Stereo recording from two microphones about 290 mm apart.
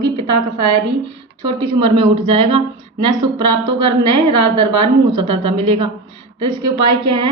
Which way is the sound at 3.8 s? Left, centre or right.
Right.